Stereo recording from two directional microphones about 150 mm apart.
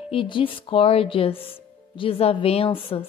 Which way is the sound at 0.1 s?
35° left (ahead or behind).